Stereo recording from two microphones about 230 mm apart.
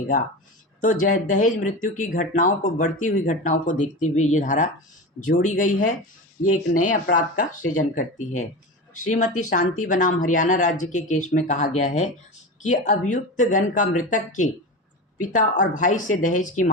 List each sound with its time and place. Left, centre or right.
0.8 s speech: left
6.4 s speech: left
6.8 s speech: left